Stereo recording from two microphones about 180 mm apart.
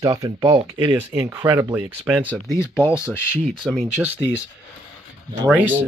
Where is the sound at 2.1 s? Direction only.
10° left (ahead or behind).